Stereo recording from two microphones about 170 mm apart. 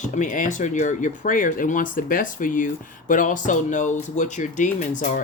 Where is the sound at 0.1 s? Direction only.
50° left (ahead or behind).